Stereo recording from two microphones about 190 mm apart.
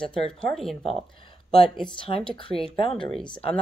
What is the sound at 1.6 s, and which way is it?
Speech, 25° left (ahead or behind).